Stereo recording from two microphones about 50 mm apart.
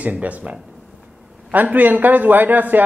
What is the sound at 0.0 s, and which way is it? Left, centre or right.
A man's voice, right.